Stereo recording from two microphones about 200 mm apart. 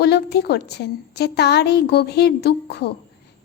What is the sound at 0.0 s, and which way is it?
A woman's voice, 55° left (ahead or behind).